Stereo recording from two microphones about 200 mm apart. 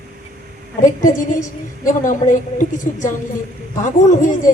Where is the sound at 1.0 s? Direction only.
40° left (ahead or behind).